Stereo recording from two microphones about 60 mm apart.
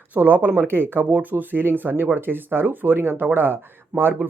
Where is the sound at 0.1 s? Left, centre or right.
Right.